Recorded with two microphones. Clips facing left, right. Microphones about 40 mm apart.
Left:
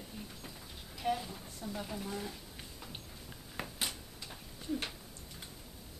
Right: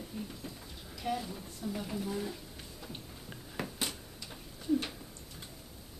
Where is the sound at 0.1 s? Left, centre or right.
Centre.